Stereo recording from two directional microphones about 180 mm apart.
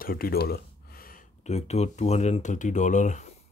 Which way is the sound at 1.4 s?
40° left (ahead or behind).